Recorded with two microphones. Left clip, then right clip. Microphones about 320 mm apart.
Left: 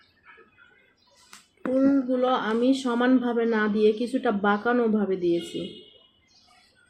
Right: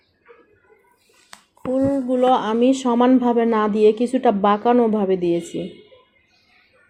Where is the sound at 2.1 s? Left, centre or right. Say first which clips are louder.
Right 7 dB; right.